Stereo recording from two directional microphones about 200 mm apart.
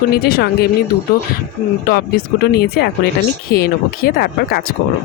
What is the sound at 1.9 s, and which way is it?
Speech, 50° left (ahead or behind).